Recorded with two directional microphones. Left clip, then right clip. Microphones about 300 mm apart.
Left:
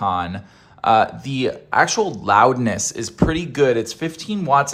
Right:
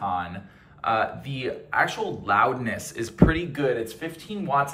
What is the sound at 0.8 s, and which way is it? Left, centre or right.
Speech, centre.